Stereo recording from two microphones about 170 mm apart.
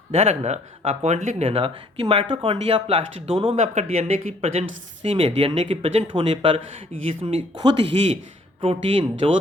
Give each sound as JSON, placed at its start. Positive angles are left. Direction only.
{"t": 0.1, "sound": "speech", "side_deg": -40}